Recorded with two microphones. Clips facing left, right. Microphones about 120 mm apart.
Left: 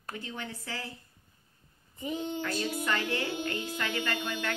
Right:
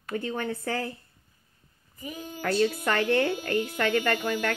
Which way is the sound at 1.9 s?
25° left (ahead or behind).